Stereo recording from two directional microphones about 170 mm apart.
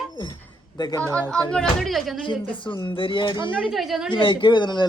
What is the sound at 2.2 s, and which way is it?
Speech, 30° left (ahead or behind).